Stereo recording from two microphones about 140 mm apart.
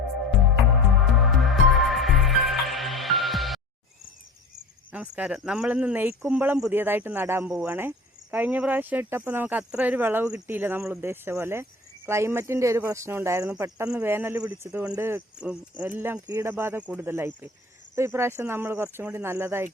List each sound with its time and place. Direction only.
1.1 s music: centre (ahead or behind)
4.9 s speech: 10° right (ahead or behind)